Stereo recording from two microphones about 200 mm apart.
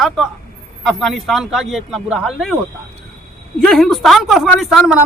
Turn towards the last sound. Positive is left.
turn(degrees=0)  # may be behind; listen again after turning